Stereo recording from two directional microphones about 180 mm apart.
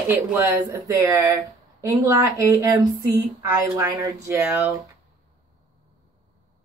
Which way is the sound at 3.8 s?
20° right (ahead or behind).